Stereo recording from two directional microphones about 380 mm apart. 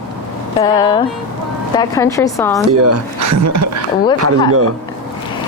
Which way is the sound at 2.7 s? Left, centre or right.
Right.